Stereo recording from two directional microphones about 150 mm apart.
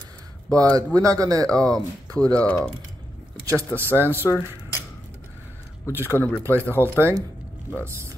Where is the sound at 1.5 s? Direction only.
5° left (ahead or behind).